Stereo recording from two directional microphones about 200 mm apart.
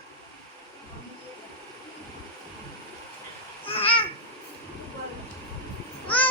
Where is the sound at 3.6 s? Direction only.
30° left (ahead or behind).